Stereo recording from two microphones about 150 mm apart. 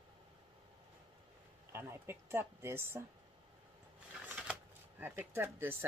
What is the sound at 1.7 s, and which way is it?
A woman's voice, 15° right (ahead or behind).